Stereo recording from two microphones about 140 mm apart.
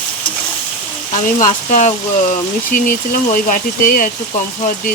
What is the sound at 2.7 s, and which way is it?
Speech, 80° left.